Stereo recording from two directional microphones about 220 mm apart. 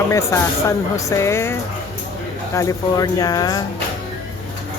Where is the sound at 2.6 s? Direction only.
15° left (ahead or behind).